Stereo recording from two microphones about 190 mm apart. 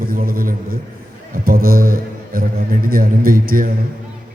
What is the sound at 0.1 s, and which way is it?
A man's voice, 50° right (ahead or behind).